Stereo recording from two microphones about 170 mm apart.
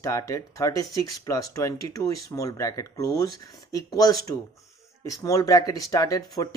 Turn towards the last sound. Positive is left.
turn(degrees=20)  # may be behind; listen again after turning